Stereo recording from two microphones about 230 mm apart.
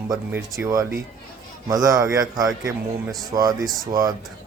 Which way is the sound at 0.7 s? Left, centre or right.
Centre.